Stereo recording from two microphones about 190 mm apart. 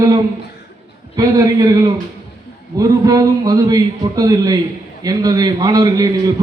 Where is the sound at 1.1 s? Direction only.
20° right (ahead or behind).